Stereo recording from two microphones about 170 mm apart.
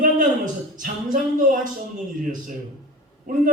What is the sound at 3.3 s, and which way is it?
Speech, 55° right (ahead or behind).